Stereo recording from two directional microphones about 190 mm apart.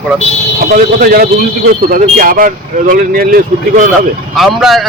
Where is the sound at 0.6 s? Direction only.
50° right (ahead or behind).